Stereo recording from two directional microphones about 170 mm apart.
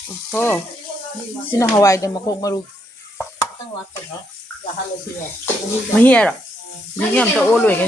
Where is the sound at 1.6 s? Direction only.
20° left (ahead or behind).